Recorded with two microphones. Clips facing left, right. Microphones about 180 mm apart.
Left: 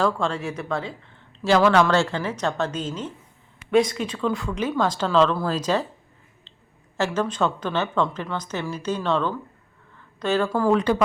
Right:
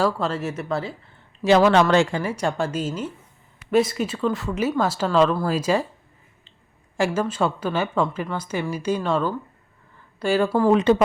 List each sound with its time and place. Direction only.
0.0 s speech: 5° right (ahead or behind)
1.5 s a woman's voice: 20° right (ahead or behind)
6.9 s a woman's voice: 10° right (ahead or behind)
10.7 s speech: 20° right (ahead or behind)